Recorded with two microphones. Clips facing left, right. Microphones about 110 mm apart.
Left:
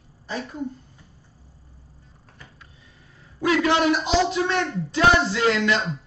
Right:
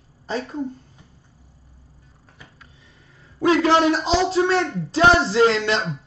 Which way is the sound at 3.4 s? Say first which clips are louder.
Right 3 dB; 30° right (ahead or behind).